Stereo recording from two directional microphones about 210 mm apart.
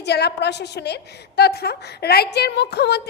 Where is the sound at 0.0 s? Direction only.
50° left (ahead or behind).